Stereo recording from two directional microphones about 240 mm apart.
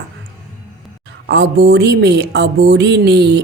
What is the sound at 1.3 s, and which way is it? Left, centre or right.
A woman's voice, right.